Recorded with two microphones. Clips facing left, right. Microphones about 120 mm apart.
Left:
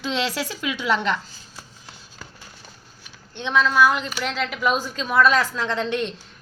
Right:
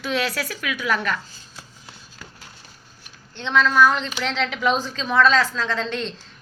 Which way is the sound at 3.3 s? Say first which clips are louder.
Right 1 dB; 15° left (ahead or behind).